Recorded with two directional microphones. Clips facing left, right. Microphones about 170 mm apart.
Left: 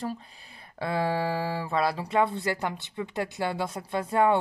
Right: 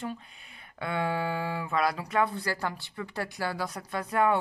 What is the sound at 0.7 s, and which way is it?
Speech, 30° left (ahead or behind).